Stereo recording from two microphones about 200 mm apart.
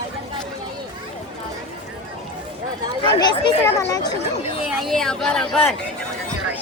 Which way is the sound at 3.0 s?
20° left (ahead or behind).